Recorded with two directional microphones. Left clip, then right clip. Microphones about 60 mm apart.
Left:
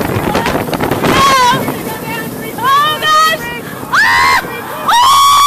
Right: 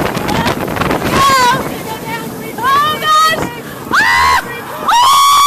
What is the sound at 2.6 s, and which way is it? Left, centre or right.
Boat, right.